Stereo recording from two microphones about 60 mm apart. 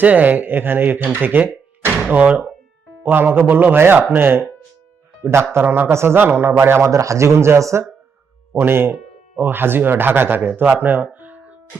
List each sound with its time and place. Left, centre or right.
0.0 s speech: right
3.0 s a man's voice: right
5.6 s speech: right
5.9 s a man's voice: right